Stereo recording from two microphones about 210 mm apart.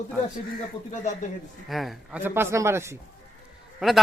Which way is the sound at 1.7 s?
Centre (ahead or behind).